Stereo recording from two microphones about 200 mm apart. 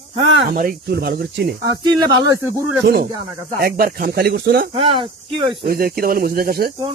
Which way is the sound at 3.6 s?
50° right (ahead or behind).